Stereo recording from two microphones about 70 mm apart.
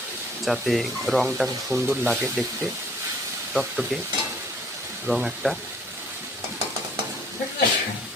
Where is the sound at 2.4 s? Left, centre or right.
Centre.